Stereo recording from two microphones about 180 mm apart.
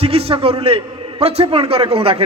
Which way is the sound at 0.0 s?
35° right (ahead or behind).